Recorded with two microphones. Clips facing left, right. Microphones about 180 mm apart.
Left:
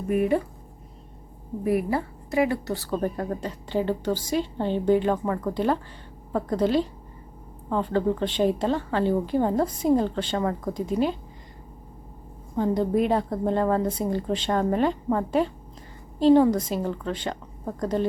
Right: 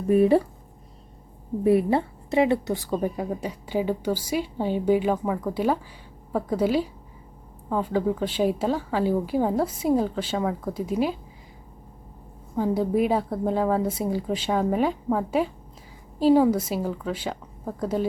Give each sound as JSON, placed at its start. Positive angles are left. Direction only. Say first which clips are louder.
{"t": 0.1, "sound": "speech", "louder": "right 5 dB", "side_deg": -30}
{"t": 1.6, "sound": "a woman's voice", "louder": "right 4 dB", "side_deg": -25}
{"t": 12.5, "sound": "a woman's voice", "louder": "even", "side_deg": -5}